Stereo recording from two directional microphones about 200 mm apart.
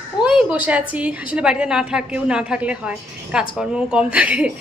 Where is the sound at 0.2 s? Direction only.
5° right (ahead or behind).